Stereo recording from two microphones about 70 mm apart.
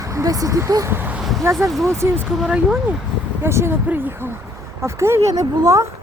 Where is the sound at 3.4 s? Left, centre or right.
Right.